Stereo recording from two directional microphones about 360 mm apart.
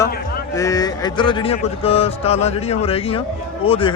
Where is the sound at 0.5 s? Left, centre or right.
Centre.